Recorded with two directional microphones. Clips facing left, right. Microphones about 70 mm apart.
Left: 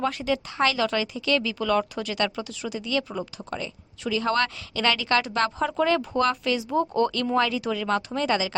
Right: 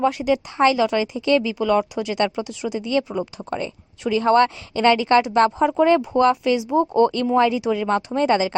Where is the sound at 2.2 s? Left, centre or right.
Right.